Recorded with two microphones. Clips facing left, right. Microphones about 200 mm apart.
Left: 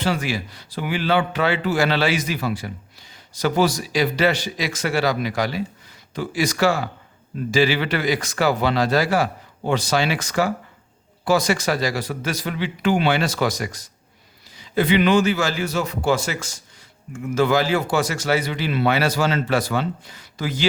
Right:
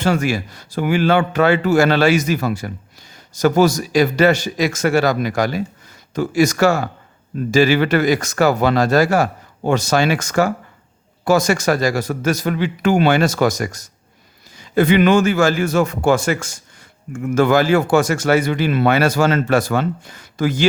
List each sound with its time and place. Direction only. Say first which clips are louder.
0.0 s speech: right 5 dB; 45° right (ahead or behind)